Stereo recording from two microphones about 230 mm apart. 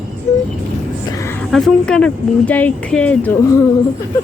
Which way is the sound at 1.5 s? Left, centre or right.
Centre.